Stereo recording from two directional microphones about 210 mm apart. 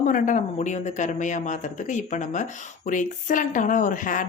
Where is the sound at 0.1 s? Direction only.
35° left (ahead or behind).